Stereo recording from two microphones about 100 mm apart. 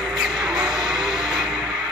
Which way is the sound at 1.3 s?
45° right (ahead or behind).